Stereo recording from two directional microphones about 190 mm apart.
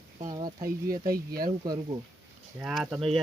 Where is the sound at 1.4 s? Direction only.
20° right (ahead or behind).